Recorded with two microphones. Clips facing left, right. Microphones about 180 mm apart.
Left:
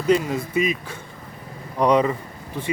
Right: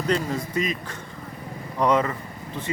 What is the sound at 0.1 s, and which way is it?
Speech, 10° left (ahead or behind).